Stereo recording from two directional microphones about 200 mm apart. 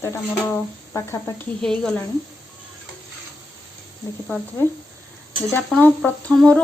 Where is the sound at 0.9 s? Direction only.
15° left (ahead or behind).